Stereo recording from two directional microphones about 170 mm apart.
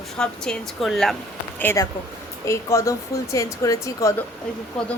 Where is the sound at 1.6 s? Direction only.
15° left (ahead or behind).